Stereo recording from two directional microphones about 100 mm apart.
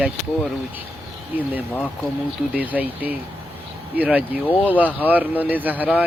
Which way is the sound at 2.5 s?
15° right (ahead or behind).